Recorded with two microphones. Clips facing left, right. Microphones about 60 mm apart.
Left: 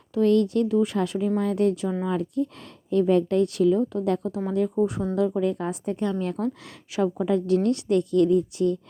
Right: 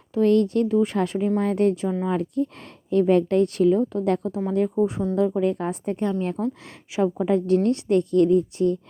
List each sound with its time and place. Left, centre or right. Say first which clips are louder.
0.1 s a woman's voice: right 1 dB; right